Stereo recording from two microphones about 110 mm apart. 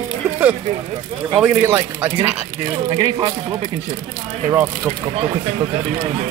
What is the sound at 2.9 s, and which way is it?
Speech, 40° right (ahead or behind).